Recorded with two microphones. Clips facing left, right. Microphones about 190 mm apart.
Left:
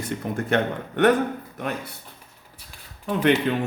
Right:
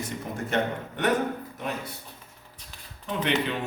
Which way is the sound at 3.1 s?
50° left (ahead or behind).